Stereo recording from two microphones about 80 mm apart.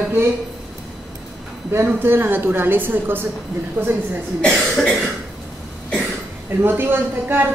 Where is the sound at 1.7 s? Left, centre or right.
Right.